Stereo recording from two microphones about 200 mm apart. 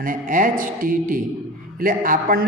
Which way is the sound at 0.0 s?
40° right (ahead or behind).